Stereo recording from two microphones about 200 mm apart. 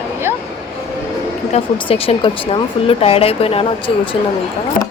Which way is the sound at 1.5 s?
30° left (ahead or behind).